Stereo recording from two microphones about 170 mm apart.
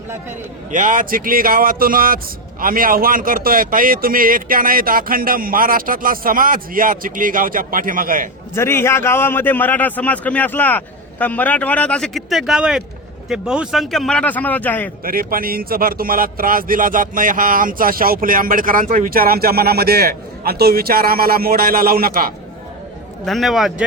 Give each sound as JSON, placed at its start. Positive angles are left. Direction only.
{"t": 0.7, "sound": "a man's voice", "side_deg": -50}
{"t": 8.5, "sound": "a man's voice", "side_deg": 15}
{"t": 15.0, "sound": "a man's voice", "side_deg": -60}
{"t": 23.2, "sound": "speech", "side_deg": 0}